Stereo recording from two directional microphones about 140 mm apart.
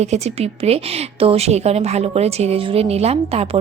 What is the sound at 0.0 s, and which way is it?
A woman's voice, 50° right (ahead or behind).